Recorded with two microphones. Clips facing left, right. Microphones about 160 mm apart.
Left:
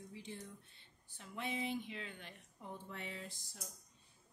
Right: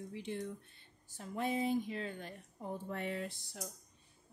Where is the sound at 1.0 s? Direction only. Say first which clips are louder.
Right 7 dB; 40° right (ahead or behind); by 3.6 s 65° right (ahead or behind).